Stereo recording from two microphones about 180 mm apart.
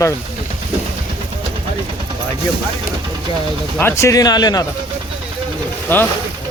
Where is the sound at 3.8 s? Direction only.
15° left (ahead or behind).